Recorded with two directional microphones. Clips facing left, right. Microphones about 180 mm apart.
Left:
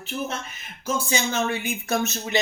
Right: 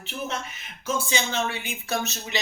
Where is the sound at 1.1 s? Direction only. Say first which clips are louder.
Left 3 dB; 45° left (ahead or behind).